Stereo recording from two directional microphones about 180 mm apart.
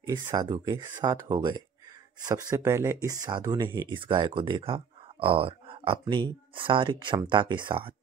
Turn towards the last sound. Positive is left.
turn(degrees=-30)  # may be behind; listen again after turning